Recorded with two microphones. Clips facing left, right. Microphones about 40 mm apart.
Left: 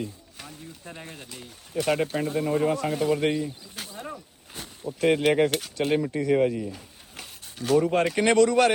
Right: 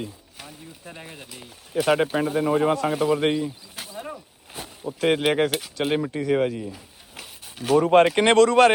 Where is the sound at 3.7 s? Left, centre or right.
Centre.